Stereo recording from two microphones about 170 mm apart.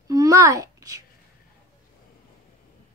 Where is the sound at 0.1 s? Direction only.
20° right (ahead or behind).